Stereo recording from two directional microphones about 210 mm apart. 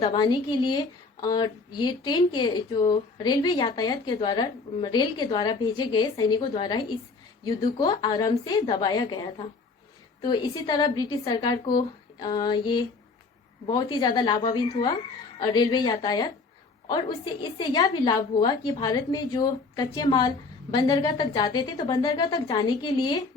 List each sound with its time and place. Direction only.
0.0 s a woman's voice: 25° left (ahead or behind)